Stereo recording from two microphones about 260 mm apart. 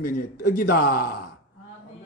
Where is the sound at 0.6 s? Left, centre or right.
Left.